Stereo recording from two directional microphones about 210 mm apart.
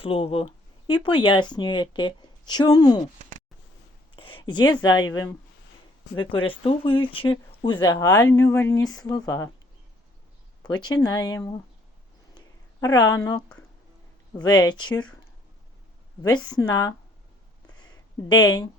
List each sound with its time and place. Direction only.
0.0 s speech: 25° left (ahead or behind)
4.1 s speech: 25° left (ahead or behind)
6.1 s speech: 25° left (ahead or behind)
10.8 s speech: 20° left (ahead or behind)
12.8 s speech: 20° left (ahead or behind)
14.4 s speech: 20° left (ahead or behind)
16.5 s speech: 20° left (ahead or behind)
17.7 s a sound: 20° left (ahead or behind)